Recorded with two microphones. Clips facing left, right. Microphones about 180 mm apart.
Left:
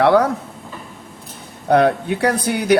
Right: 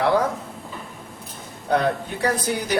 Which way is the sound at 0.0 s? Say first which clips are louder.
Left 6 dB; 70° left (ahead or behind).